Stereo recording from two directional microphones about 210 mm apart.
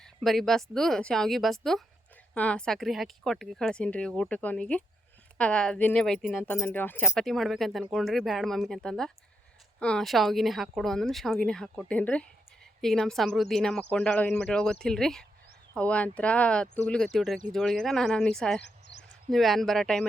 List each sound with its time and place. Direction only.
0.0 s speech: centre (ahead or behind)
18.6 s a sound: 55° left (ahead or behind)
19.3 s speech: centre (ahead or behind)